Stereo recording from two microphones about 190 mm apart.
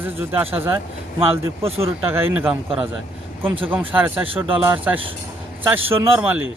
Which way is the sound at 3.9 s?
10° right (ahead or behind).